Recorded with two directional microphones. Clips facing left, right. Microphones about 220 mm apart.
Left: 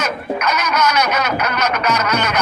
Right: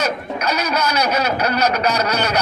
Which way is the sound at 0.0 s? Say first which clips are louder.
Left 1 dB; 35° right (ahead or behind).